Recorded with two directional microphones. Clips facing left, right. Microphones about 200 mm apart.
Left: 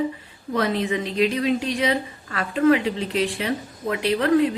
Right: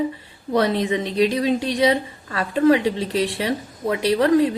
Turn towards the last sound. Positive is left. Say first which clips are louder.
# right 4 dB
turn(degrees=-30)  # may be behind; listen again after turning